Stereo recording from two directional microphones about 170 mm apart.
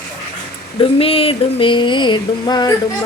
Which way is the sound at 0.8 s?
35° left (ahead or behind).